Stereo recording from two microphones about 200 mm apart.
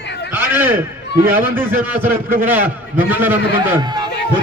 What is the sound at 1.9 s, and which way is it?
A man's voice, 10° right (ahead or behind).